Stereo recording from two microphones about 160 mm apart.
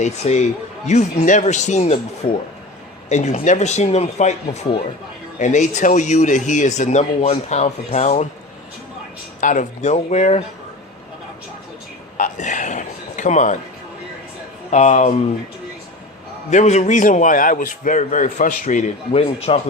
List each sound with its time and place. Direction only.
0.0 s a man's voice: 45° left (ahead or behind)
9.4 s a man's voice: 50° left (ahead or behind)
12.1 s a sound: 50° left (ahead or behind)
14.7 s a man's voice: 45° left (ahead or behind)
16.5 s a man's voice: 45° left (ahead or behind)